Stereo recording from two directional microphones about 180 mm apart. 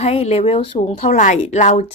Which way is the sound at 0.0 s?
35° left (ahead or behind).